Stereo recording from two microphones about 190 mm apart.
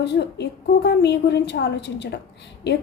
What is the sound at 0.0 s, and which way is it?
A woman's voice, 65° left (ahead or behind).